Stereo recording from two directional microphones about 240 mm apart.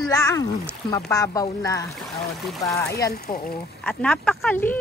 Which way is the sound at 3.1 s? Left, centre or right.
Left.